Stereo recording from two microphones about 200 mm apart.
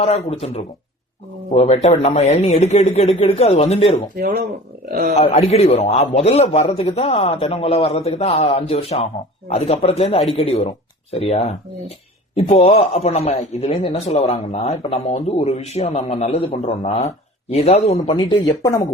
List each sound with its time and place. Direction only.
0.0 s a man's voice: 30° left (ahead or behind)
4.9 s a man's voice: 45° right (ahead or behind)
5.1 s a man's voice: 30° left (ahead or behind)